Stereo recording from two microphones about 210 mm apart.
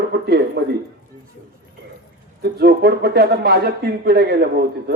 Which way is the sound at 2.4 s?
50° right (ahead or behind).